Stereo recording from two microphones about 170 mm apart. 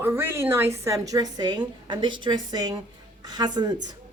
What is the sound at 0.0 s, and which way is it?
Speech, 15° right (ahead or behind).